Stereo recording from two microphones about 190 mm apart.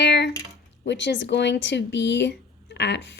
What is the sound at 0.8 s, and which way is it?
A woman's voice, 70° left (ahead or behind).